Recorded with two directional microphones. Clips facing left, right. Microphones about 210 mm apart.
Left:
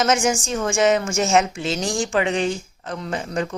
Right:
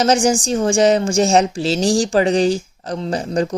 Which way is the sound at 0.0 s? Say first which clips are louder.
Right 5 dB; 35° right (ahead or behind).